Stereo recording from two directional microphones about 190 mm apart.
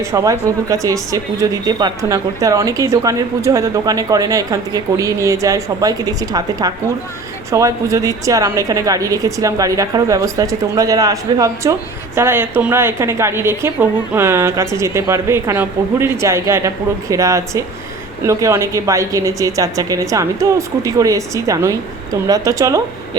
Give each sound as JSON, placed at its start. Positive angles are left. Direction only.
{"t": 0.0, "sound": "a woman's voice", "side_deg": -15}